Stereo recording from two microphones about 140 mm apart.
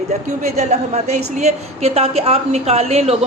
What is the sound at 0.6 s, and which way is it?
A woman's voice, 55° right (ahead or behind).